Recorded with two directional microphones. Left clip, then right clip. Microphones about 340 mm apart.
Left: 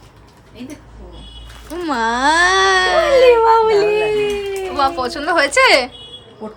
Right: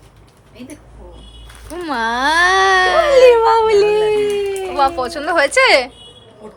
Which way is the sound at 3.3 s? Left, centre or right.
Right.